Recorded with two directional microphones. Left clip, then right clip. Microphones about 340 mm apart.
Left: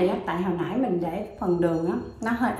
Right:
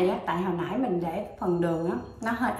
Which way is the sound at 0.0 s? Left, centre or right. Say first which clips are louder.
Left 1 dB; centre.